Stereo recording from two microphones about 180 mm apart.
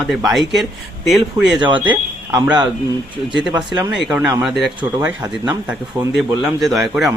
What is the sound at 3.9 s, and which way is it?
Speech, 5° right (ahead or behind).